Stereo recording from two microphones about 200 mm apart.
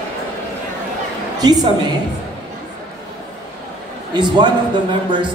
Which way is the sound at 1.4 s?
20° right (ahead or behind).